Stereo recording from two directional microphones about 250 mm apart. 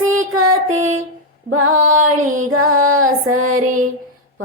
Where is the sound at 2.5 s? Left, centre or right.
Right.